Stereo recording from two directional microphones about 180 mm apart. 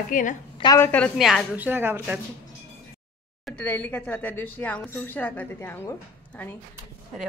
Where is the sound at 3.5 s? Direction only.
10° left (ahead or behind).